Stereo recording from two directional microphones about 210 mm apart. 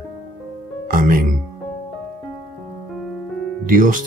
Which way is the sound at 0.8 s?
40° right (ahead or behind).